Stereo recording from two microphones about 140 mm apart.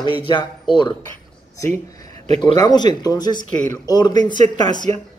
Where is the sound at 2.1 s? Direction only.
50° right (ahead or behind).